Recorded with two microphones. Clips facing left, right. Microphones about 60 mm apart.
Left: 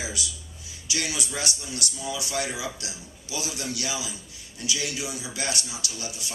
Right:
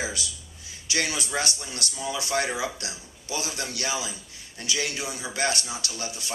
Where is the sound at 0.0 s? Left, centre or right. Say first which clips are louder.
Right 2 dB; right.